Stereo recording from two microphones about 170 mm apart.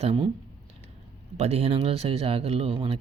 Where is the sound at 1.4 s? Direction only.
40° right (ahead or behind).